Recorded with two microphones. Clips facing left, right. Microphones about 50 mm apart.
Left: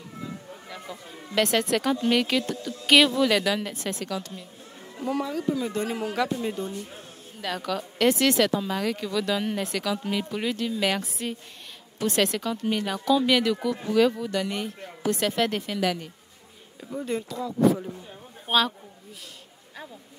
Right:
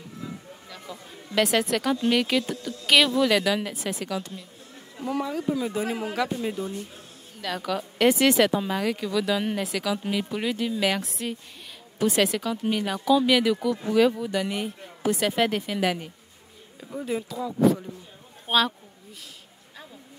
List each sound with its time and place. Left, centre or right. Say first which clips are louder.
0.7 s a sound: left 1 dB; centre
1.3 s speech: even; centre
15.8 s speech: even; centre
16.8 s speech: even; centre